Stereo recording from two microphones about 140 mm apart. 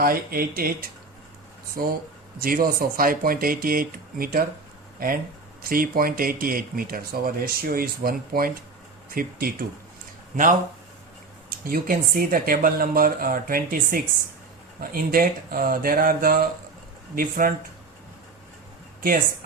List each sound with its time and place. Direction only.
0.0 s speech: 90° right
1.8 s speech: 90° right
11.6 s speech: 90° right